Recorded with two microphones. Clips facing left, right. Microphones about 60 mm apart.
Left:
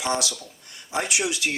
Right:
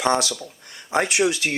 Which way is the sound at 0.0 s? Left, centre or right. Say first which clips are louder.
Right 5 dB; right.